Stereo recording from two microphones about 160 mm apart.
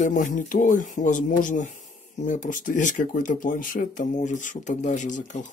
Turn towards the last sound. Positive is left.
turn(degrees=50)  # may be behind; listen again after turning